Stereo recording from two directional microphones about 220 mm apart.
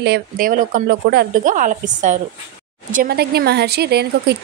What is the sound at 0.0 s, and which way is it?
A woman's voice, 45° right (ahead or behind).